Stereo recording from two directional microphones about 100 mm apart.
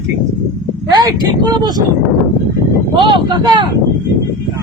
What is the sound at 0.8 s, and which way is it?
Speech, 45° right (ahead or behind).